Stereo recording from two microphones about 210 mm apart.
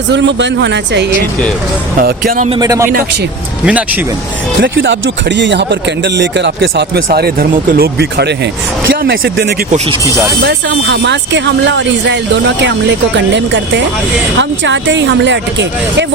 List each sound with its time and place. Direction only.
0.1 s speech: 55° right (ahead or behind)
2.0 s speech: 45° right (ahead or behind)
2.5 s speech: 15° right (ahead or behind)
4.6 s speech: 60° right (ahead or behind)
13.3 s speech: 60° right (ahead or behind)